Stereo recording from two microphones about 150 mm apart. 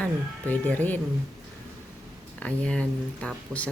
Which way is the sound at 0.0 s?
10° left (ahead or behind).